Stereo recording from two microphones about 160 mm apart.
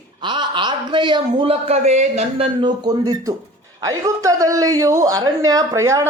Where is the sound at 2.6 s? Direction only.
25° right (ahead or behind).